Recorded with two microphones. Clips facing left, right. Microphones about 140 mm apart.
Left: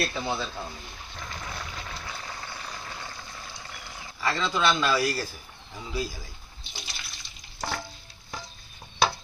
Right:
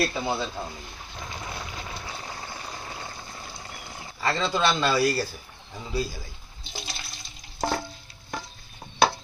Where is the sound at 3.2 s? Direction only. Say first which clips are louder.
Right 2 dB; 35° right (ahead or behind).